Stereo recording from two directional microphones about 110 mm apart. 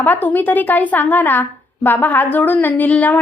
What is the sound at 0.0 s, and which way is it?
A woman's voice, 15° left (ahead or behind).